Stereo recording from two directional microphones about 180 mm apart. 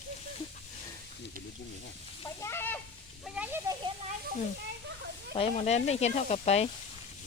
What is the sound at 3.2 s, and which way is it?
Snake, 5° right (ahead or behind).